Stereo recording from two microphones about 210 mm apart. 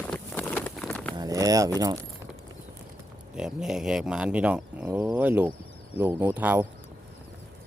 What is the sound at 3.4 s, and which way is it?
Speech, 5° right (ahead or behind).